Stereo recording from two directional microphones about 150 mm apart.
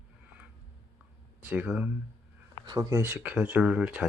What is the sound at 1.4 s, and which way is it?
Speech, 10° right (ahead or behind).